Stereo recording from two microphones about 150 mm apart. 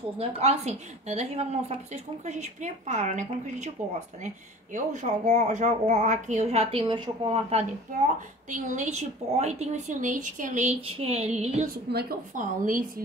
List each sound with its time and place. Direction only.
0.2 s a woman's voice: 45° right (ahead or behind)
4.7 s a woman's voice: 55° right (ahead or behind); by 7.6 s 40° right (ahead or behind)
8.1 s a woman's voice: 60° right (ahead or behind)
11.7 s a woman's voice: 90° right; by 13.0 s 65° right (ahead or behind)